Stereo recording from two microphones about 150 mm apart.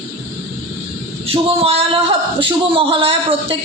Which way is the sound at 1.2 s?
40° right (ahead or behind).